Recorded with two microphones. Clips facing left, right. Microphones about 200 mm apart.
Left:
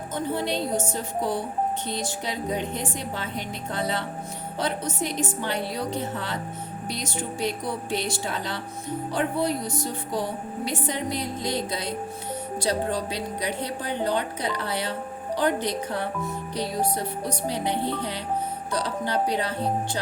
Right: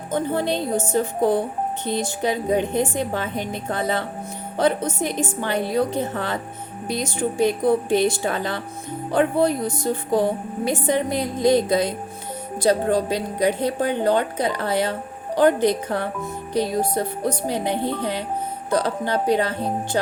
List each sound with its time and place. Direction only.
0.1 s a woman's voice: 50° right (ahead or behind)